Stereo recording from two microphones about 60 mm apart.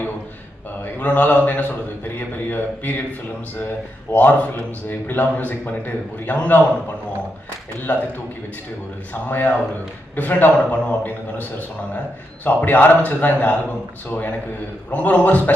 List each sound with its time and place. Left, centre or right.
0.9 s a man's voice: left
7.9 s a man's voice: left
10.2 s a man's voice: left
12.5 s a man's voice: left